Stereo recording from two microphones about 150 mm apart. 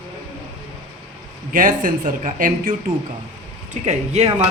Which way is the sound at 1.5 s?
65° right (ahead or behind).